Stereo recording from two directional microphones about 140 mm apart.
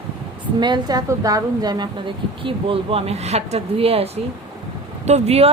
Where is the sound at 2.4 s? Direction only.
40° right (ahead or behind).